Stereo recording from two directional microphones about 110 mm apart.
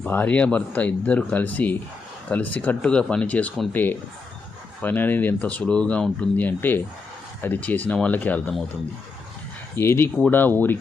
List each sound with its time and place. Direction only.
0.0 s speech: 15° left (ahead or behind)
9.7 s speech: 20° left (ahead or behind)